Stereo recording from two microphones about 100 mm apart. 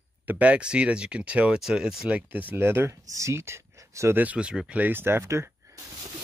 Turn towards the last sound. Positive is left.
turn(degrees=-35)  # may be behind; listen again after turning